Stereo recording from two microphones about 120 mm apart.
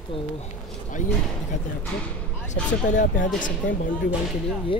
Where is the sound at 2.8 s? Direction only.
90° left.